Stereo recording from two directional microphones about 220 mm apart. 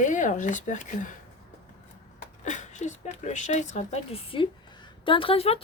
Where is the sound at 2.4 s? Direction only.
35° left (ahead or behind).